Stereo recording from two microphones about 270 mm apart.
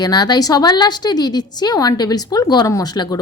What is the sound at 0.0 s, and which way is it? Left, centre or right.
A woman's voice, centre.